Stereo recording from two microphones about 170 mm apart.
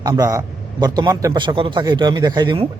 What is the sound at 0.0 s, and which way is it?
Speech, 20° right (ahead or behind).